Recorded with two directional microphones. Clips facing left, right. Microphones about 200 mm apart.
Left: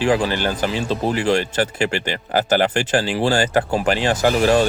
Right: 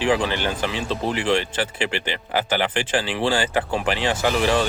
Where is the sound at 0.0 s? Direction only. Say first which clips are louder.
Left 3 dB; 40° left (ahead or behind).